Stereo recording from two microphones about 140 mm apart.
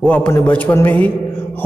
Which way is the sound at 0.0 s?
10° left (ahead or behind).